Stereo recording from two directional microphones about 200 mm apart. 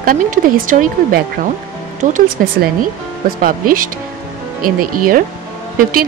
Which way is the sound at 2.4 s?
50° right (ahead or behind).